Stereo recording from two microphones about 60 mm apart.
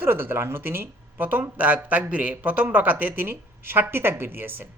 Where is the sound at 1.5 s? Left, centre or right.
Right.